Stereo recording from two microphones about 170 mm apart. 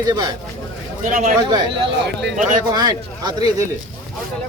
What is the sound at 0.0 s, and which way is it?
Speech, 25° right (ahead or behind).